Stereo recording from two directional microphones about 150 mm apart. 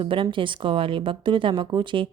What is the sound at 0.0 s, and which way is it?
A woman's voice, 35° right (ahead or behind).